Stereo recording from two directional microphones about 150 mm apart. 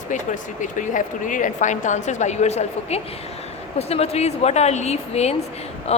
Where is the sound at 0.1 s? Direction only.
55° left (ahead or behind).